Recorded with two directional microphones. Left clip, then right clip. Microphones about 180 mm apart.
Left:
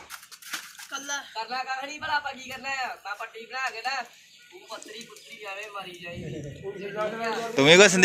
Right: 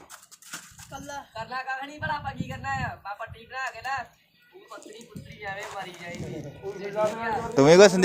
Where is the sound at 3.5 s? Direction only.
15° right (ahead or behind).